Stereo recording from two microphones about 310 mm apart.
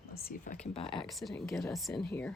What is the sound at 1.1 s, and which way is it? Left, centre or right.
Speech, centre.